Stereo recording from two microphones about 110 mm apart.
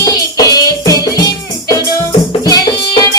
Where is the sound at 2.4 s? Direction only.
35° left (ahead or behind).